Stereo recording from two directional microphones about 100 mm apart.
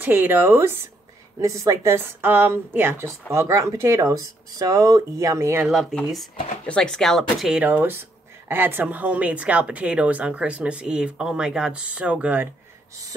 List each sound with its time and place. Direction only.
0.0 s a woman's voice: 20° right (ahead or behind)
5.7 s speech: centre (ahead or behind)
7.6 s a woman's voice: 20° right (ahead or behind)